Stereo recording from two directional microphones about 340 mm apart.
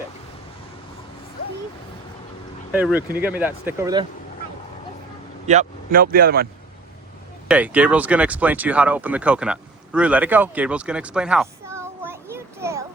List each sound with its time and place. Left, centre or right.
2.7 s speech: centre
5.5 s speech: right
7.4 s speech: centre